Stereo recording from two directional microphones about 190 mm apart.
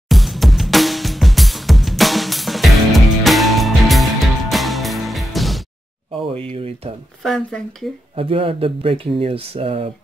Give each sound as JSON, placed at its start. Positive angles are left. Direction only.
{"t": 0.1, "sound": "music", "side_deg": 0}
{"t": 6.5, "sound": "speech", "side_deg": -30}
{"t": 7.2, "sound": "speech", "side_deg": 0}
{"t": 8.2, "sound": "speech", "side_deg": -30}